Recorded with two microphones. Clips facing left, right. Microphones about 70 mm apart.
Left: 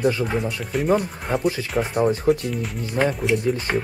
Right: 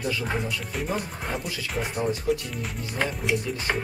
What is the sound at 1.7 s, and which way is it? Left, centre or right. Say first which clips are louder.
Speech: left 6 dB; centre.